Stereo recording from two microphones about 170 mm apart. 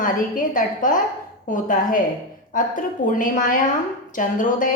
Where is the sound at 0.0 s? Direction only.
50° left (ahead or behind).